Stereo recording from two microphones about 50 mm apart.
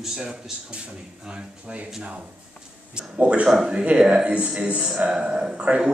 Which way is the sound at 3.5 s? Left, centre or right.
Centre.